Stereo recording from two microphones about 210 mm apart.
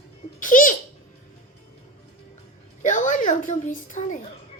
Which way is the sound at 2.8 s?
35° left (ahead or behind).